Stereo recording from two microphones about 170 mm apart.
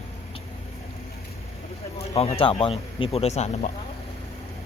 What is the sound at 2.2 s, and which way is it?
Speech, 35° left (ahead or behind).